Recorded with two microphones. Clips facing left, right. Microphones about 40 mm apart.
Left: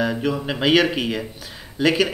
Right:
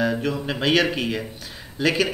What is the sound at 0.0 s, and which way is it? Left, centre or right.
Speech, centre.